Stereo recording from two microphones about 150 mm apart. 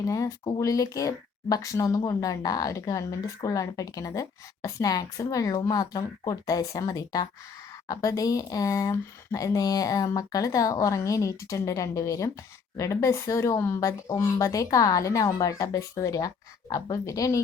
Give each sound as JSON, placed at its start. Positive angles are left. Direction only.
{"t": 0.0, "sound": "speech", "side_deg": 20}